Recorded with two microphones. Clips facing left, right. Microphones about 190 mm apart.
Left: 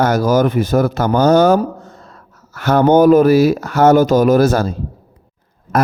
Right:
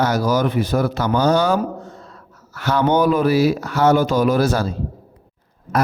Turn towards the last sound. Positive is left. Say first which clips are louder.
# left 4 dB
turn(degrees=50)  # may be behind; listen again after turning